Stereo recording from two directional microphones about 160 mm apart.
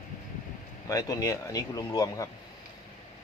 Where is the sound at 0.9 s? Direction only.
20° left (ahead or behind).